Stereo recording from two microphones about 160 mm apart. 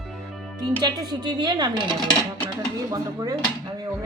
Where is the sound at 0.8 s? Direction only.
25° right (ahead or behind).